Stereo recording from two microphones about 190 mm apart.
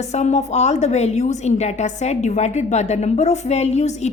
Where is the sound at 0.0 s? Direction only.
35° left (ahead or behind).